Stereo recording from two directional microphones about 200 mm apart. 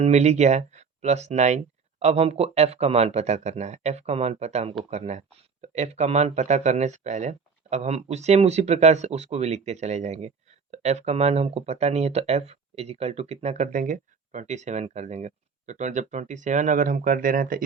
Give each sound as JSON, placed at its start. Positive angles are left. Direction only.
{"t": 0.0, "sound": "speech", "side_deg": -35}